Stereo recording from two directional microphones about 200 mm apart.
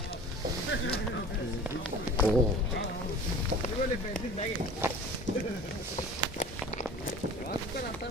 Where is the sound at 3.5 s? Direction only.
50° right (ahead or behind).